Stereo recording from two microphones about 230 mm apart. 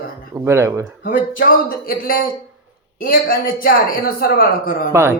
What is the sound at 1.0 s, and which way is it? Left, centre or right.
Speech, left.